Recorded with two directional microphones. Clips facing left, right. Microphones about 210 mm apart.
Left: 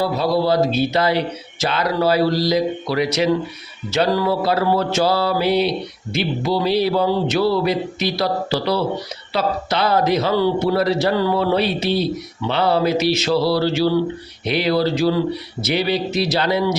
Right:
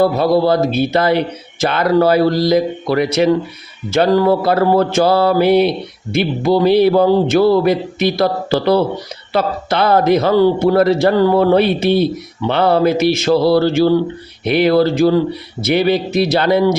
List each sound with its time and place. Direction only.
0.0 s a man's voice: 55° right (ahead or behind)